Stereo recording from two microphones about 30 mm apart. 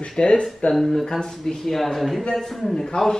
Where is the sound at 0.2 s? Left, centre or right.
Left.